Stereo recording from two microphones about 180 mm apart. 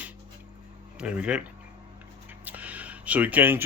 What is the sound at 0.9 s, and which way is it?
Speech, 5° right (ahead or behind).